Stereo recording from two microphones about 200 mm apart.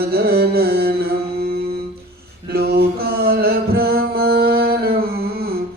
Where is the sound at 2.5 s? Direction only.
50° right (ahead or behind).